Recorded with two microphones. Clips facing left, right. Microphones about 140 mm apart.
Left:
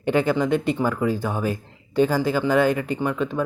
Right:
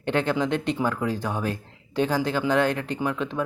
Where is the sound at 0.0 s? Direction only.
5° left (ahead or behind).